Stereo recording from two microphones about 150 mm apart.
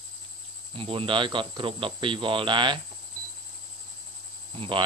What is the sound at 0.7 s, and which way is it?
Speech, 35° right (ahead or behind).